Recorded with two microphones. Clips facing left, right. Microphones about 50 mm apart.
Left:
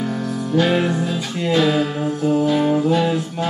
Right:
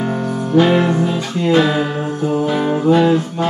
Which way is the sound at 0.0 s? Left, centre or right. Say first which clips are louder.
Right 4 dB; right.